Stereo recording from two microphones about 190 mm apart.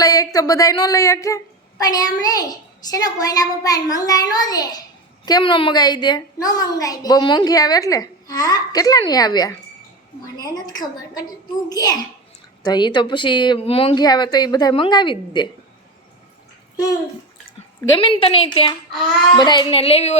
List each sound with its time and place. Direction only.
0.0 s a woman's voice: 20° left (ahead or behind)
16.7 s a child's voice: 20° left (ahead or behind)